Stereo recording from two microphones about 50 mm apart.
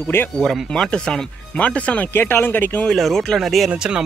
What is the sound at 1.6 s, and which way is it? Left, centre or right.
Speech, left.